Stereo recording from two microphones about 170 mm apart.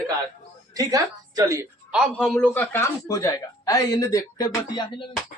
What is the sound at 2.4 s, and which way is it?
Speech, 15° left (ahead or behind).